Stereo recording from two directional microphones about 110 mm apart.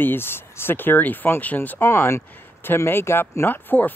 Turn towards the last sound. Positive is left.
turn(degrees=15)  # may be behind; listen again after turning